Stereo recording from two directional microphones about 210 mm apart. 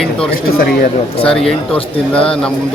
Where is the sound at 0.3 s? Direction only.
50° left (ahead or behind).